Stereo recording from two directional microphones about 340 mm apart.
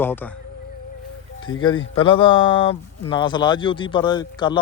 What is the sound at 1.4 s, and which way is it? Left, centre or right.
Music, left.